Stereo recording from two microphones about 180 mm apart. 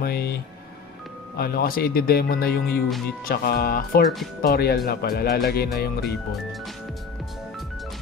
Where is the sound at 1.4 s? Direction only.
55° left (ahead or behind).